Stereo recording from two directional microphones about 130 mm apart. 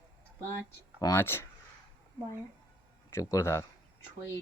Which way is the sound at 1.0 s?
25° left (ahead or behind).